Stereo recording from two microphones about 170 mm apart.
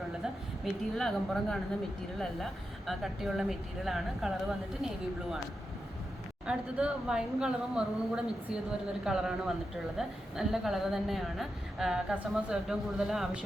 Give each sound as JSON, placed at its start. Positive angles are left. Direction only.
{"t": 0.6, "sound": "a woman's voice", "side_deg": 0}
{"t": 6.4, "sound": "a woman's voice", "side_deg": -5}